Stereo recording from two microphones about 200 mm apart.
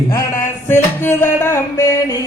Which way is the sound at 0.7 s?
10° left (ahead or behind).